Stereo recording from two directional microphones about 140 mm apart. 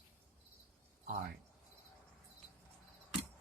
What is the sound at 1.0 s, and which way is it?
Speech, 60° right (ahead or behind).